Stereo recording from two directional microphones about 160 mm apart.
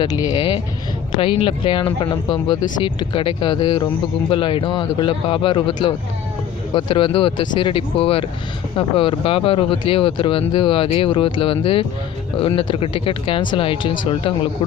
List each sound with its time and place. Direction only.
0.0 s speech: 25° left (ahead or behind)